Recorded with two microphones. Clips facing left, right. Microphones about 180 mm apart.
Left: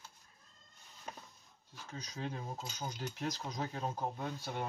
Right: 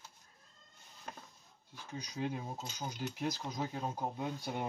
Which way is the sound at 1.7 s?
10° right (ahead or behind).